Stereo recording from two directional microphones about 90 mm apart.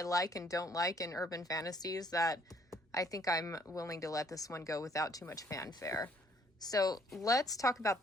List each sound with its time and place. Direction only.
0.0 s a woman's voice: 40° left (ahead or behind)